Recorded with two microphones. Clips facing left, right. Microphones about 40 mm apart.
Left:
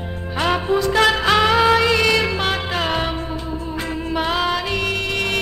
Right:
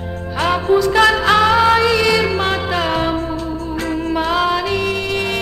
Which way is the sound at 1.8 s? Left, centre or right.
Left.